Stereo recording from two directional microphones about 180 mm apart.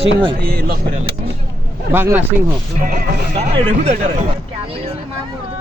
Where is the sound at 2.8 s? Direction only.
50° right (ahead or behind).